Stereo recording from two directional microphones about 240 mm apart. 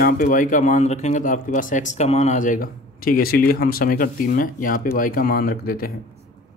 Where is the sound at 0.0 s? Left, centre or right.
Left.